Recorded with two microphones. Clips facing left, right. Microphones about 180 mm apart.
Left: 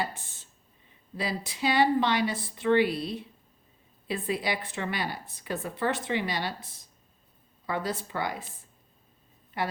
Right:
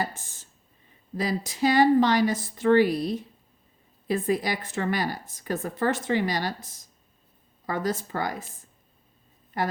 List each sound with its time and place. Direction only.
1.1 s a woman's voice: 45° right (ahead or behind)
9.5 s a woman's voice: 45° right (ahead or behind)